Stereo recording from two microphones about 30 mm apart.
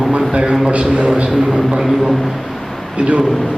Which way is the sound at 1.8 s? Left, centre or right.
Centre.